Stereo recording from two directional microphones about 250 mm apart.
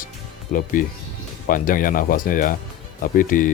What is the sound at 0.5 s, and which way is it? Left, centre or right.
Speech, left.